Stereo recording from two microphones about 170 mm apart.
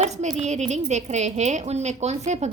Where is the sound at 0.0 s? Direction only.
40° right (ahead or behind).